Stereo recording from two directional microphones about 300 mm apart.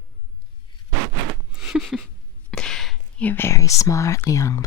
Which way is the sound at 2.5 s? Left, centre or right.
Centre.